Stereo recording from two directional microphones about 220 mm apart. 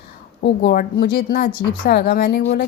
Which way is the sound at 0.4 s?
45° left (ahead or behind).